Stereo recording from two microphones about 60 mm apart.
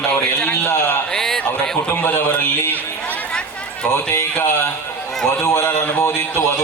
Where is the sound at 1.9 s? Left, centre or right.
Left.